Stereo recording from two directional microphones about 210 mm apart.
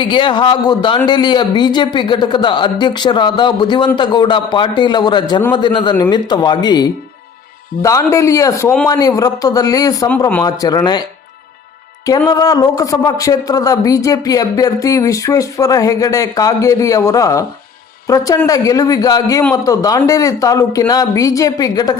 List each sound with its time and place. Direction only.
0.0 s speech: 20° left (ahead or behind)
12.0 s speech: 15° left (ahead or behind)